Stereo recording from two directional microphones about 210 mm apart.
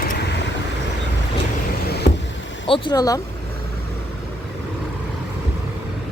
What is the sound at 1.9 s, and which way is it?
Vehicle, 50° left (ahead or behind).